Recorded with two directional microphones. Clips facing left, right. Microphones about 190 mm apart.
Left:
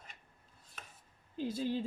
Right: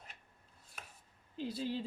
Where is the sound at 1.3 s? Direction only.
45° left (ahead or behind).